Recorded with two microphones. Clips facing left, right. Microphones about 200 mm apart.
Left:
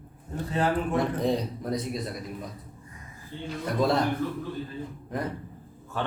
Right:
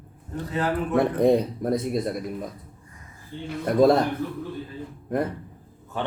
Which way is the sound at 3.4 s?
50° right (ahead or behind).